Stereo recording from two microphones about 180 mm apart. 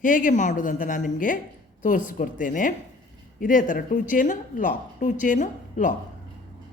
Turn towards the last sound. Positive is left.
turn(degrees=45)  # may be behind; listen again after turning